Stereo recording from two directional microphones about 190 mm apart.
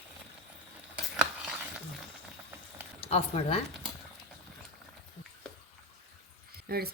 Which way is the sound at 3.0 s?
30° left (ahead or behind).